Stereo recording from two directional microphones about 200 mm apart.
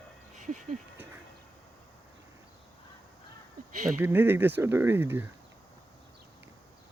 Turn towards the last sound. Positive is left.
turn(degrees=-10)  # may be behind; listen again after turning